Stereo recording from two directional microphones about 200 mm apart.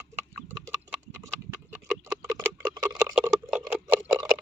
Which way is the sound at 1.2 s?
15° right (ahead or behind).